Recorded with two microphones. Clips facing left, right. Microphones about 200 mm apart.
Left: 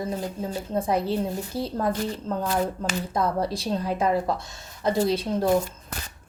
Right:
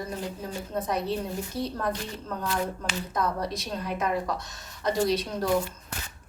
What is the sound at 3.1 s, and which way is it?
A woman's voice, 30° left (ahead or behind).